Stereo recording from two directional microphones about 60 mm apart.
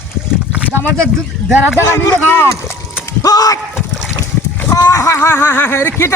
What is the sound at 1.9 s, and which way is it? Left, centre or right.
Speech, left.